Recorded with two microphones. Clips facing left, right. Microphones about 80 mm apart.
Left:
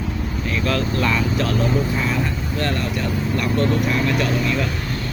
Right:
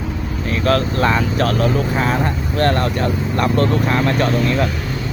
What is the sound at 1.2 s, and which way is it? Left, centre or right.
Speech, right.